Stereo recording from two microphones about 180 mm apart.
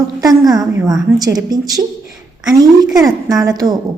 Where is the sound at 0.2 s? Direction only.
20° right (ahead or behind).